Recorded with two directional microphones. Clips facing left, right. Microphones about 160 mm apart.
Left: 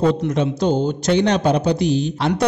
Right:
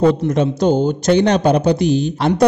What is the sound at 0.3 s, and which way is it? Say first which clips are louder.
A man's voice: right 3 dB; 45° right (ahead or behind).